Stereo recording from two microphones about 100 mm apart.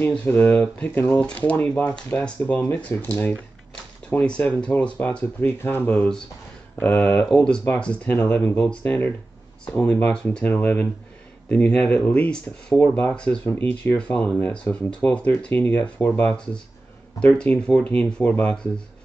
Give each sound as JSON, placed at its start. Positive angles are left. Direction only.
{"t": 0.3, "sound": "speech", "side_deg": 15}
{"t": 4.2, "sound": "speech", "side_deg": 10}
{"t": 7.3, "sound": "speech", "side_deg": 10}
{"t": 10.1, "sound": "speech", "side_deg": 10}
{"t": 13.5, "sound": "speech", "side_deg": 20}